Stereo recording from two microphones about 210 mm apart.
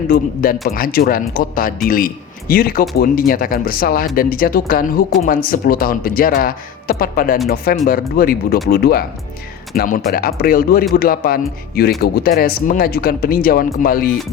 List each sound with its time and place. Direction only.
0.1 s speech: 45° left (ahead or behind)